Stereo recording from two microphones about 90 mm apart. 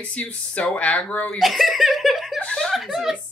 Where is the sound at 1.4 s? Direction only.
Centre (ahead or behind).